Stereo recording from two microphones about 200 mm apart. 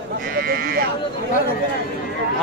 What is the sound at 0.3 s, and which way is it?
Sheep, 45° right (ahead or behind).